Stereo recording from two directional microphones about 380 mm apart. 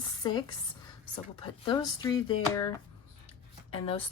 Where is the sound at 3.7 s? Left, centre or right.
Centre.